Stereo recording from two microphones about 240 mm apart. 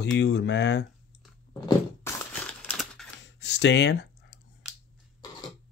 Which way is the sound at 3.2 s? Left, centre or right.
Left.